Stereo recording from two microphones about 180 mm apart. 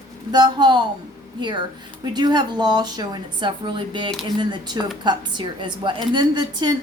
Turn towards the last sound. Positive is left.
turn(degrees=-25)  # may be behind; listen again after turning